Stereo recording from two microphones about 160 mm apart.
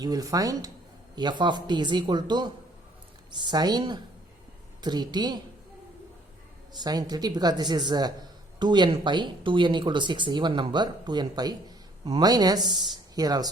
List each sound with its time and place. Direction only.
0.0 s speech: 25° right (ahead or behind)
6.7 s speech: 25° right (ahead or behind)